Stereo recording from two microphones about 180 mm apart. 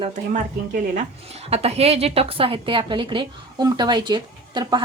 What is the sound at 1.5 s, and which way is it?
A woman's voice, 35° right (ahead or behind).